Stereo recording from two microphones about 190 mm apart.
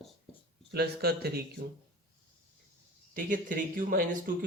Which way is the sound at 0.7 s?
60° right (ahead or behind).